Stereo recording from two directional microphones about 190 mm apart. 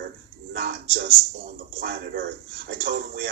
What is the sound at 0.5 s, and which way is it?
Speech, 50° right (ahead or behind).